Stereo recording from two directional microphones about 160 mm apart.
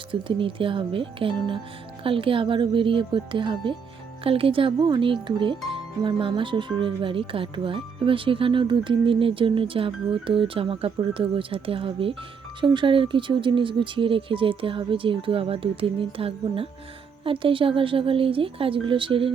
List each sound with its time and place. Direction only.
0.1 s speech: 30° right (ahead or behind)